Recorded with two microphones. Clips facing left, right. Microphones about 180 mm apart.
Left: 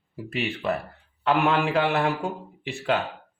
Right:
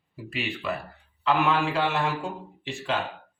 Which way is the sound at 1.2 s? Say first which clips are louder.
Left 2 dB; 60° left (ahead or behind).